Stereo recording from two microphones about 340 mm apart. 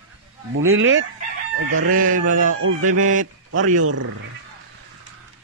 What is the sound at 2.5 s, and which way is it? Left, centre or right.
Speech, right.